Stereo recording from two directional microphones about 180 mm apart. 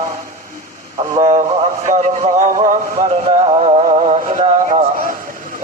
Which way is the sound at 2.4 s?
45° right (ahead or behind).